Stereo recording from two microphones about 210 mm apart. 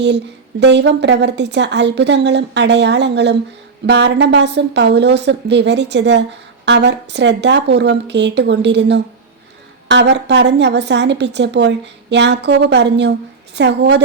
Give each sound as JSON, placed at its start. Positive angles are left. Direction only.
{"t": 0.6, "sound": "a woman's voice", "side_deg": -55}